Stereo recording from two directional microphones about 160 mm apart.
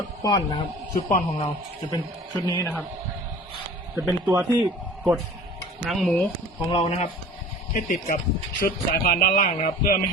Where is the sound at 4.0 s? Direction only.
15° right (ahead or behind).